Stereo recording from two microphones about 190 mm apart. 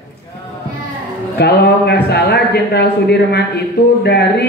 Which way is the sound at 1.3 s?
60° left (ahead or behind).